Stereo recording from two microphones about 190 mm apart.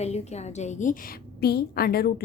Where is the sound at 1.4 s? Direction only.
55° left (ahead or behind).